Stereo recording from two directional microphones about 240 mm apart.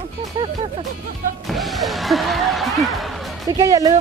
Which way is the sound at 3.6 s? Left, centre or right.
Centre.